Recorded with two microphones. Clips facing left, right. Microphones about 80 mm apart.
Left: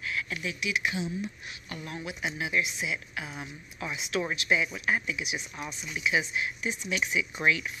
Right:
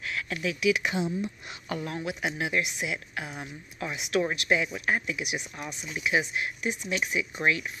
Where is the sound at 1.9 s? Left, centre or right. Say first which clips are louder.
Even; right.